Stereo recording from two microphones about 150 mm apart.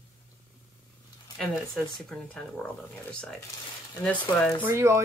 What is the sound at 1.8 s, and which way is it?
Speech, centre (ahead or behind).